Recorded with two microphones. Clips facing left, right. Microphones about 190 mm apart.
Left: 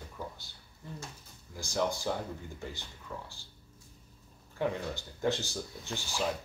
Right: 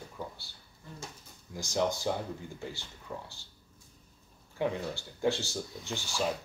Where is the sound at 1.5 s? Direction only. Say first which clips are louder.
Right 2 dB; 15° right (ahead or behind).